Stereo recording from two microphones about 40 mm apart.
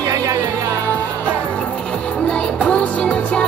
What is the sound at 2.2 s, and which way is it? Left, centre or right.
Music, left.